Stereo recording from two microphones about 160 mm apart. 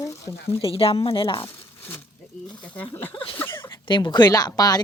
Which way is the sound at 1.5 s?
15° left (ahead or behind).